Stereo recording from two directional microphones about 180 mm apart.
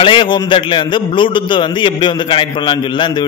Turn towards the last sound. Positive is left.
turn(degrees=25)  # may be behind; listen again after turning